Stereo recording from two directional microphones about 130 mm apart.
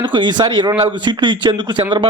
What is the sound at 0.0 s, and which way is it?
Speech, 35° right (ahead or behind).